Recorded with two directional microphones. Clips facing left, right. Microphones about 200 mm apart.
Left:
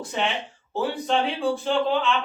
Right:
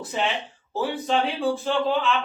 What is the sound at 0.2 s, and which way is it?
Speech, 5° right (ahead or behind).